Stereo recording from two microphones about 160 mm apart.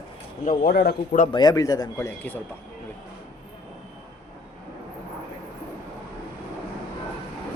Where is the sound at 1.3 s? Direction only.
25° left (ahead or behind).